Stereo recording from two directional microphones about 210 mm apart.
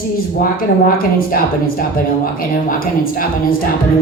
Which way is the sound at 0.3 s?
45° left (ahead or behind).